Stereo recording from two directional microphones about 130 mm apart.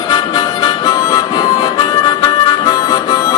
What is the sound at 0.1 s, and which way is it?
Harmonica, 30° left (ahead or behind).